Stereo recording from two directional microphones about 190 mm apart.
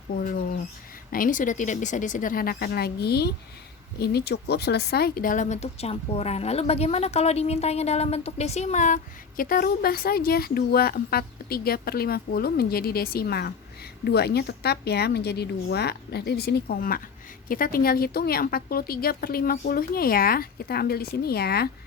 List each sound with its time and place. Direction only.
1.1 s a woman's voice: 45° left (ahead or behind)